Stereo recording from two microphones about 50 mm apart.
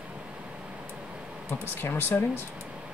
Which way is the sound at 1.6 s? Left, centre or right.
Left.